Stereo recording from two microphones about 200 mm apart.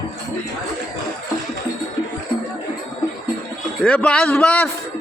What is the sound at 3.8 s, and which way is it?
Speech, 5° left (ahead or behind).